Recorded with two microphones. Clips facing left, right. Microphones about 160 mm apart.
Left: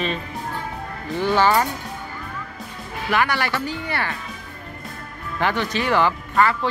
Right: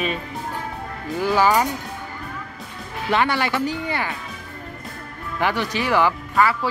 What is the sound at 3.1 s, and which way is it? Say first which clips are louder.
Speech: right 1 dB; 20° right (ahead or behind).